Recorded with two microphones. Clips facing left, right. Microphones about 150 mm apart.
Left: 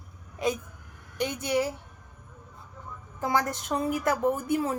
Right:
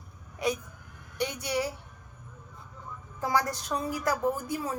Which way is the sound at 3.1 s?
20° left (ahead or behind).